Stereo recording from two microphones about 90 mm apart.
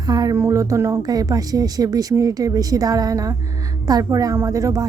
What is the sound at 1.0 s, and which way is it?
Speech, 45° right (ahead or behind).